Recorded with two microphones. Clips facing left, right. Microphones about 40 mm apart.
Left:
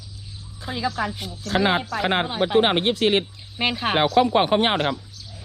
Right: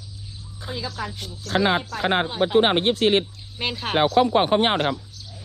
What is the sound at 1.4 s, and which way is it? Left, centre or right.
Speech, left.